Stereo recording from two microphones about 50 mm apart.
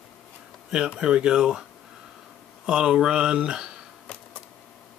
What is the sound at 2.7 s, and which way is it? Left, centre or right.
Speech, centre.